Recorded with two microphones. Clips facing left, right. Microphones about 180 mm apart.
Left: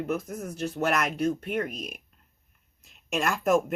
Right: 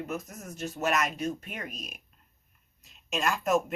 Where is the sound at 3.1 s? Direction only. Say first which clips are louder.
Left 3 dB; 60° left (ahead or behind).